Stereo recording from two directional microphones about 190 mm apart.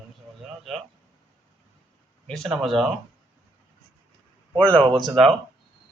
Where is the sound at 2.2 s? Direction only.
Centre (ahead or behind).